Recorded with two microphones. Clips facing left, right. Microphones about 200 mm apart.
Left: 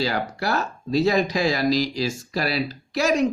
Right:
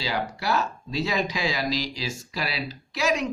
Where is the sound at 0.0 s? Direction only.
50° left (ahead or behind).